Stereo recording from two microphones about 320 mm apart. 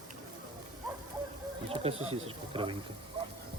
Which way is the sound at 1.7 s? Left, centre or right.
Centre.